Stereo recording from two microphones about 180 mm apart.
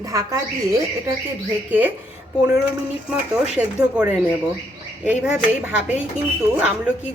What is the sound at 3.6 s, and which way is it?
A woman's voice, 10° right (ahead or behind).